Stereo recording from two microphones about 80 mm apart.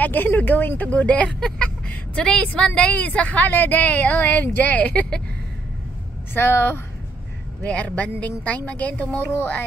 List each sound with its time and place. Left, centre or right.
0.0 s speech: left
6.3 s speech: left
7.6 s speech: centre